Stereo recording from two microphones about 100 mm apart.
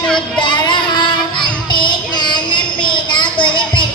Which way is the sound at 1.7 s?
50° left (ahead or behind).